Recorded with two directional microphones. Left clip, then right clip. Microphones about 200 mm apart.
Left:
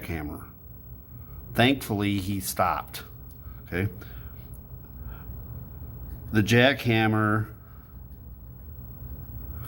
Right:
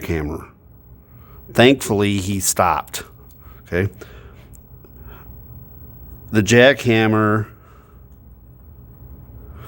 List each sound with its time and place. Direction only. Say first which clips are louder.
0.0 s speech: right 11 dB; 50° right (ahead or behind)
1.5 s a man's voice: right 10 dB; 50° right (ahead or behind)
6.3 s speech: right 9 dB; 50° right (ahead or behind)